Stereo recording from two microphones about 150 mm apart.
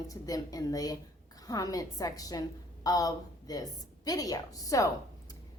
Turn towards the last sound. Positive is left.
turn(degrees=20)  # may be behind; listen again after turning